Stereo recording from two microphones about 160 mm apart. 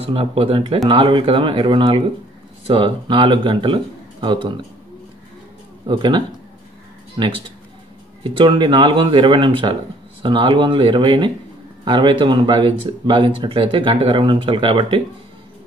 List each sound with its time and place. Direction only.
0.0 s speech: 35° right (ahead or behind)
5.9 s speech: 30° right (ahead or behind)